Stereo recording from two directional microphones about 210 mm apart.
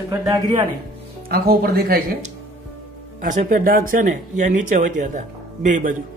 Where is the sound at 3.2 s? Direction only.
40° right (ahead or behind).